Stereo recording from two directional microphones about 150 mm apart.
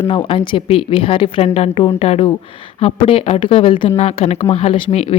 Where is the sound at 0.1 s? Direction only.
35° left (ahead or behind).